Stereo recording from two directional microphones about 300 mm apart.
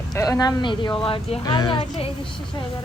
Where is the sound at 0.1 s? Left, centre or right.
Centre.